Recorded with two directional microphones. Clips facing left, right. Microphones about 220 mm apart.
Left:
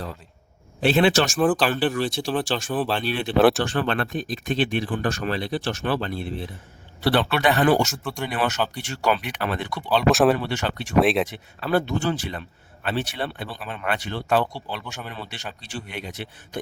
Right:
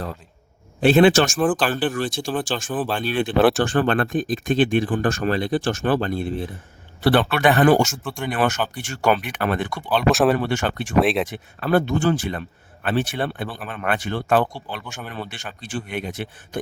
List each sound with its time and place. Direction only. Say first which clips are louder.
0.8 s speech: right 5 dB; 50° right (ahead or behind)
1.4 s speech: even; centre (ahead or behind)
1.9 s speech: even; 50° right (ahead or behind)
2.6 s speech: even; 5° right (ahead or behind)
3.0 s speech: right 4 dB; 50° right (ahead or behind)
3.3 s speech: even; centre (ahead or behind)
3.6 s speech: right 4 dB; 50° right (ahead or behind)
7.9 s speech: right 1 dB; centre (ahead or behind)
8.3 s speech: right 4 dB; 50° right (ahead or behind)
10.1 s speech: even; centre (ahead or behind)
10.3 s speech: right 4 dB; 50° right (ahead or behind)
10.9 s speech: even; centre (ahead or behind)
11.3 s speech: right 3 dB; 50° right (ahead or behind)